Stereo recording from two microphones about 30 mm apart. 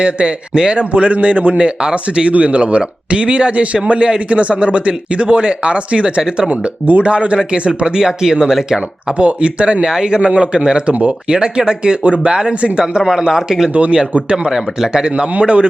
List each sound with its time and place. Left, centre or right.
0.0 s speech: right
0.9 s speech: right
1.8 s speech: right
2.4 s speech: right
6.2 s speech: right
6.5 s speech: right
7.0 s speech: right
9.1 s speech: right
9.8 s speech: right
12.3 s speech: right
14.3 s speech: right
14.5 s speech: right
15.1 s speech: right